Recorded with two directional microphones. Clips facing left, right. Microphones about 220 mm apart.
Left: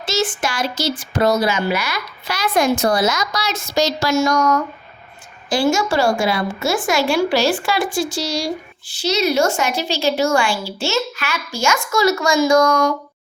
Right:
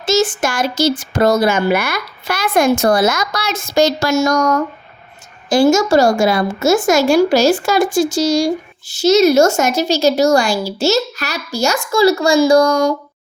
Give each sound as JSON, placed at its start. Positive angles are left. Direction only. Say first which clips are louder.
{"t": 0.0, "sound": "a woman's voice", "louder": "right 6 dB", "side_deg": -45}